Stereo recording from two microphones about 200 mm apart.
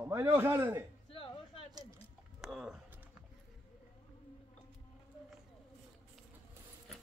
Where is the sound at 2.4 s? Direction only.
5° right (ahead or behind).